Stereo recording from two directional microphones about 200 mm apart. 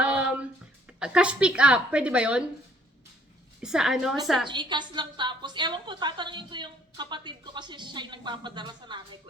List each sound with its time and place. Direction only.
0.0 s a sound: 5° right (ahead or behind)
0.9 s speech: 5° right (ahead or behind)
3.6 s speech: 5° right (ahead or behind)
4.4 s a woman's voice: 20° right (ahead or behind)